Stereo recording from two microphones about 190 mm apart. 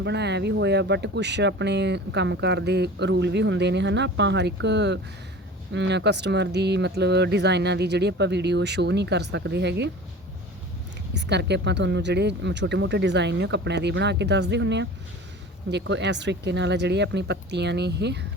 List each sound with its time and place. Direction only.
0.0 s speech: 65° right (ahead or behind)
11.1 s speech: 65° right (ahead or behind)